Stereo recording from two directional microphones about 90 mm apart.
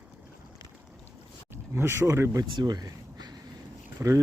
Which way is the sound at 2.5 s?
50° right (ahead or behind).